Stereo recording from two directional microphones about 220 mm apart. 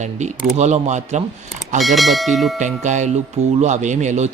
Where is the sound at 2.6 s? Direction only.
35° right (ahead or behind).